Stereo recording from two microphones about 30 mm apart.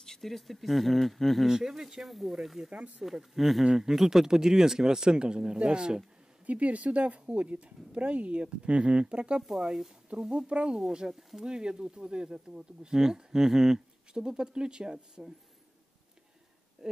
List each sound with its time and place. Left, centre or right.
0.0 s speech: centre
1.5 s speech: centre
2.0 s speech: centre
2.7 s speech: right
3.0 s speech: centre
3.7 s speech: centre; by 5.9 s right
6.4 s speech: right
9.5 s speech: centre
10.2 s speech: right